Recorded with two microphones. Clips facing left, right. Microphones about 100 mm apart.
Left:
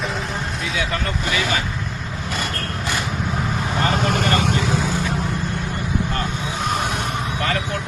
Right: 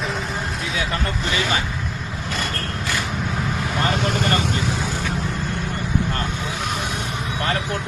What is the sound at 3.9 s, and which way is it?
Vehicle, 45° left (ahead or behind).